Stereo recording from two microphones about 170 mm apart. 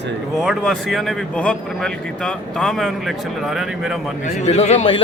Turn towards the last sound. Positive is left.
turn(degrees=35)  # may be behind; listen again after turning